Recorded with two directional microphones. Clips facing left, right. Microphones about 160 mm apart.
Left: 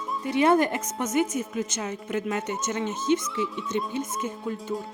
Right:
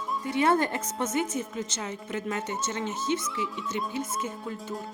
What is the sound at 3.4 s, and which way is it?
Music, 20° left (ahead or behind).